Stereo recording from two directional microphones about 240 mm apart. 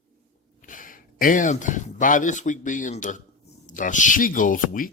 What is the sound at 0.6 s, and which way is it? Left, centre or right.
Speech, left.